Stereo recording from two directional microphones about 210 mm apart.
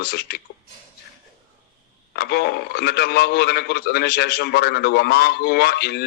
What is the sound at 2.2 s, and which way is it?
A man's voice, 50° left (ahead or behind).